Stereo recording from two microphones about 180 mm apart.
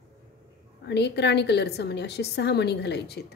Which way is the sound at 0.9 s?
70° left (ahead or behind).